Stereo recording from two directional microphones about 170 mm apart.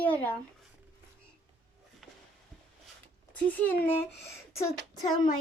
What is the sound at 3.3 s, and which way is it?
Speech, 10° left (ahead or behind).